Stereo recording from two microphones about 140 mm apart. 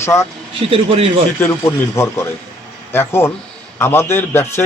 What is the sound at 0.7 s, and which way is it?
Speech, 40° right (ahead or behind).